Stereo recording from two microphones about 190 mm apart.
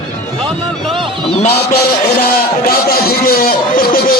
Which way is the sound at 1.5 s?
55° left (ahead or behind).